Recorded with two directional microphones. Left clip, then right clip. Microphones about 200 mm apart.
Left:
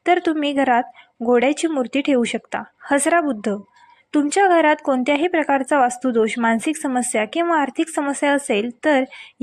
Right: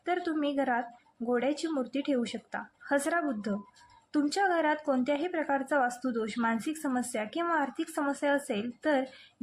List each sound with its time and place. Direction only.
0.0 s a woman's voice: 30° left (ahead or behind)